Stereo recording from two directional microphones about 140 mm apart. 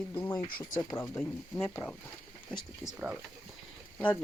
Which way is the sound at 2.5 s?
5° right (ahead or behind).